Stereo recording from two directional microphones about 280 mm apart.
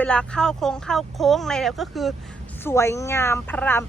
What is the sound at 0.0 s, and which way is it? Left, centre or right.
A woman's voice, centre.